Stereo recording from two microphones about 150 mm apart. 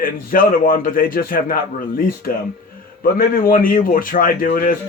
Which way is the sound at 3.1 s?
70° left (ahead or behind).